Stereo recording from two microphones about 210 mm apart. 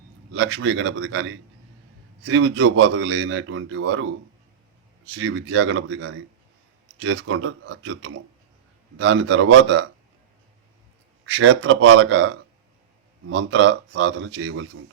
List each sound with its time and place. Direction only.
0.3 s a man's voice: 65° right (ahead or behind)
5.1 s a man's voice: 65° right (ahead or behind)
11.3 s a man's voice: 60° right (ahead or behind)